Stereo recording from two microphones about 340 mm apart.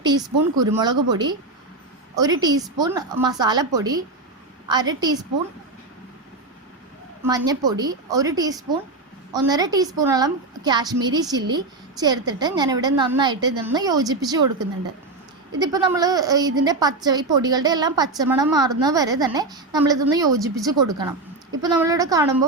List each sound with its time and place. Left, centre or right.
0.0 s a woman's voice: centre
7.3 s a woman's voice: centre